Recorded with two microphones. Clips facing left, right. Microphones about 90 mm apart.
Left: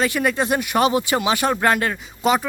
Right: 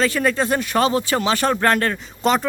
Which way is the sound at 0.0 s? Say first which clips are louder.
Right 1 dB; 15° left (ahead or behind).